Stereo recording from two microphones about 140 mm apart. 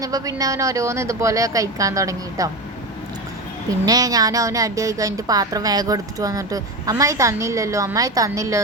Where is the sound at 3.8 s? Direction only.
25° right (ahead or behind).